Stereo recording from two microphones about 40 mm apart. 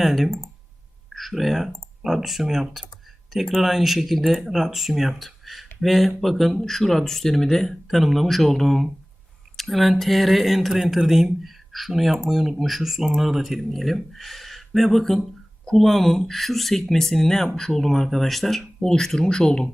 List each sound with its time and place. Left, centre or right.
0.0 s speech: centre
10.7 s speech: centre